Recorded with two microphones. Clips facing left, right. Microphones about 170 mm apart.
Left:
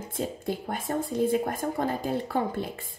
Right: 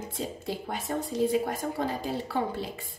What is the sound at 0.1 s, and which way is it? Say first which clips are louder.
A woman's voice: left 5 dB; 50° left (ahead or behind).